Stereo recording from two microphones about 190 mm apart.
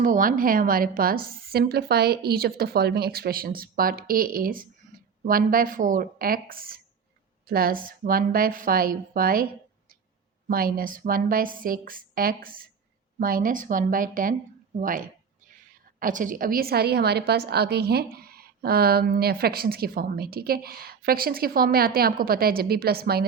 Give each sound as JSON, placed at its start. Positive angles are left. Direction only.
{"t": 0.0, "sound": "a woman's voice", "side_deg": -45}
{"t": 10.5, "sound": "a woman's voice", "side_deg": -50}
{"t": 14.8, "sound": "a sound", "side_deg": -45}
{"t": 16.0, "sound": "a woman's voice", "side_deg": -45}